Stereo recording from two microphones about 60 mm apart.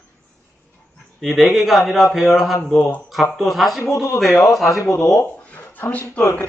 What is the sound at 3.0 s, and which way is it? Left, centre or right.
Speech, centre.